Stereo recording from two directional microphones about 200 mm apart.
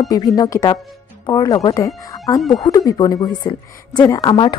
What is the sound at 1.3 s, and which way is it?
Speech, 20° left (ahead or behind).